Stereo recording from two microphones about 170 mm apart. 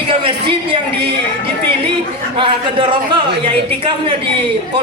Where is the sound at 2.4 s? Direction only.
30° right (ahead or behind).